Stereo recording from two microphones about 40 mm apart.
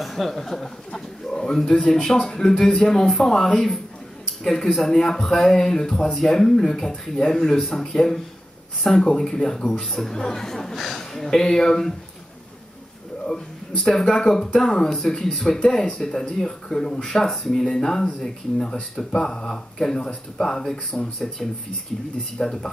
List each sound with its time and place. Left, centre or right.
0.0 s a man's voice: centre
13.7 s a man's voice: centre